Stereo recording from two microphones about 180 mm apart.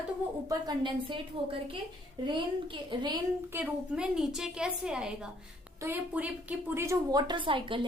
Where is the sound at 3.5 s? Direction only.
5° right (ahead or behind); by 7.9 s 30° right (ahead or behind).